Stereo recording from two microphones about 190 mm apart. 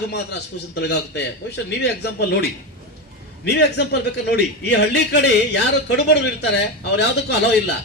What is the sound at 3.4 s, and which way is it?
A man's voice, 60° left (ahead or behind).